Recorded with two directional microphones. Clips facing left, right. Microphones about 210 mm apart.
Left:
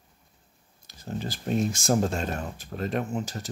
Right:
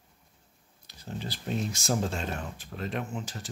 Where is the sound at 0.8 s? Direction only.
45° left (ahead or behind).